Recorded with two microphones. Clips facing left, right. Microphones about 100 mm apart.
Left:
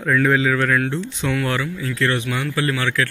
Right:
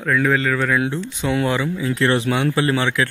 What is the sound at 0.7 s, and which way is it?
Speech, 10° right (ahead or behind).